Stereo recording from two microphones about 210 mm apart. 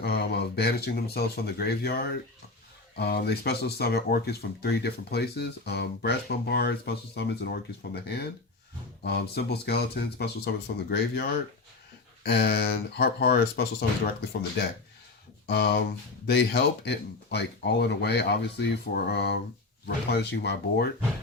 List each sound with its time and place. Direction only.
0.0 s speech: 50° left (ahead or behind)
15.4 s speech: 50° left (ahead or behind)